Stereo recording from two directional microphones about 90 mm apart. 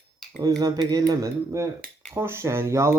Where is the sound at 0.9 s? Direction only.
40° right (ahead or behind).